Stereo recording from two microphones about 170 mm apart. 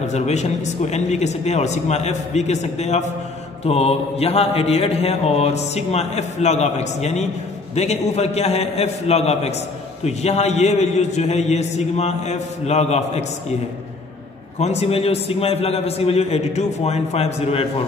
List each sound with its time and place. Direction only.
0.0 s mantra: 40° left (ahead or behind)
14.6 s mantra: 40° left (ahead or behind)